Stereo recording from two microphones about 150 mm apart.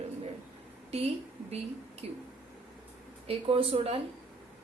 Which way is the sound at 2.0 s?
45° right (ahead or behind).